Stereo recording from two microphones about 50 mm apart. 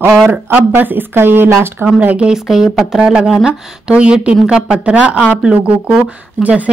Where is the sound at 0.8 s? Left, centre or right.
Right.